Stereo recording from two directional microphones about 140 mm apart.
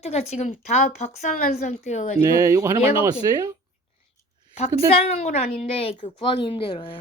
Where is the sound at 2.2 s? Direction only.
25° right (ahead or behind).